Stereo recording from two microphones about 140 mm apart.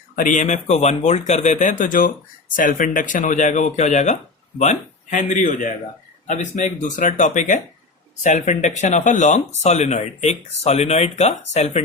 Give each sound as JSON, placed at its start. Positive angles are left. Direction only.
{"t": 0.2, "sound": "speech", "side_deg": 65}